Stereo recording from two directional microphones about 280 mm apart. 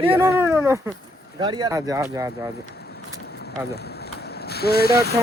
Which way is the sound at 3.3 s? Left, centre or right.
Left.